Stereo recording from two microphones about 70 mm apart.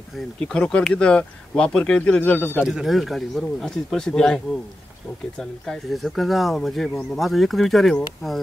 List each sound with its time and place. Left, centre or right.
0.5 s speech: centre
2.6 s speech: centre
5.4 s speech: centre